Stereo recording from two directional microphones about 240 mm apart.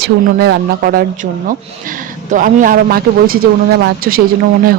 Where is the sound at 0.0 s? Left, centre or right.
Right.